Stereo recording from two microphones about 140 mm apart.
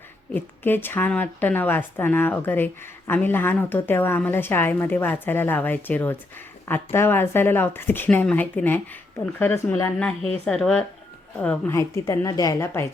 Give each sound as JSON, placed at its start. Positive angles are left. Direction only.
{"t": 0.3, "sound": "a woman's voice", "side_deg": 15}
{"t": 11.7, "sound": "a woman's voice", "side_deg": 20}